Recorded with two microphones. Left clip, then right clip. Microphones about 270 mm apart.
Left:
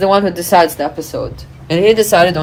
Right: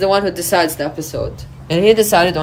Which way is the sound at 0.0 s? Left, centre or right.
Centre.